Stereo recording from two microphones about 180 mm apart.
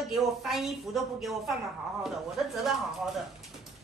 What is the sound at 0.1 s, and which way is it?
A woman's voice, centre (ahead or behind).